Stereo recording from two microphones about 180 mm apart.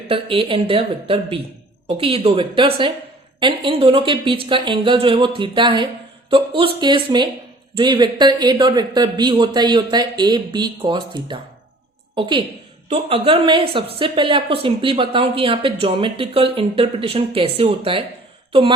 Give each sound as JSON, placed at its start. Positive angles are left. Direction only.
{"t": 0.1, "sound": "speech", "side_deg": -30}